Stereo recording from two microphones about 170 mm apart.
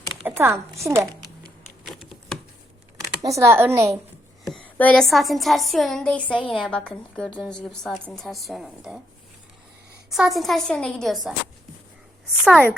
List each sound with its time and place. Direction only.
0.3 s speech: 15° right (ahead or behind)
3.2 s speech: 20° right (ahead or behind)
4.4 s a woman's voice: 5° left (ahead or behind)
10.1 s a woman's voice: centre (ahead or behind)